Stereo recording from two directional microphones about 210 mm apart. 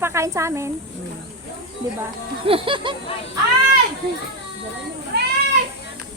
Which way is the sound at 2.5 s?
25° right (ahead or behind).